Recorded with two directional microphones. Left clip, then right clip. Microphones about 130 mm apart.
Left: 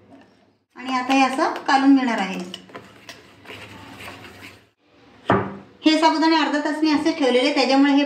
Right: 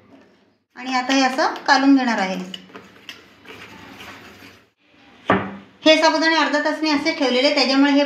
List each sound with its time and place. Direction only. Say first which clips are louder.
0.7 s a woman's voice: even; 25° right (ahead or behind)
5.9 s a woman's voice: right 2 dB; 40° right (ahead or behind)